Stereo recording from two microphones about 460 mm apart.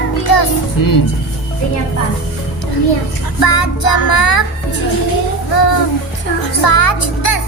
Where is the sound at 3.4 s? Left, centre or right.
Left.